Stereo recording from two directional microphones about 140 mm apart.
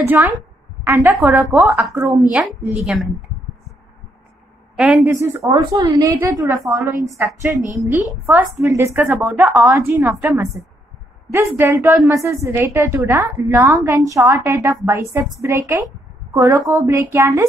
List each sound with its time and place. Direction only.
0.0 s a woman's voice: 15° right (ahead or behind)
2.0 s a woman's voice: 25° right (ahead or behind)
2.3 s a woman's voice: 5° right (ahead or behind)
4.7 s a woman's voice: 5° right (ahead or behind)
5.0 s a woman's voice: 15° right (ahead or behind)